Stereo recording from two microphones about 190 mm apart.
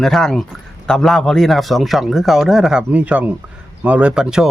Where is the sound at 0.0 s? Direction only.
Centre (ahead or behind).